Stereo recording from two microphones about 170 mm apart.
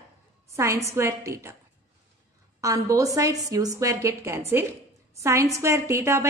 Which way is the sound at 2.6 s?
20° right (ahead or behind).